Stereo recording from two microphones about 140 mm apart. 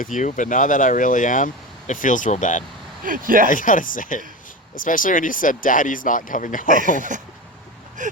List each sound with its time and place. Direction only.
0.0 s speech: 65° left (ahead or behind)
3.0 s speech: 80° right
3.5 s speech: 70° left (ahead or behind)
6.9 s a sound: 65° right (ahead or behind)
8.0 s gasp: 65° right (ahead or behind)